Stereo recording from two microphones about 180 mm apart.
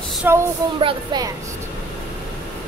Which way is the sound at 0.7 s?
25° right (ahead or behind).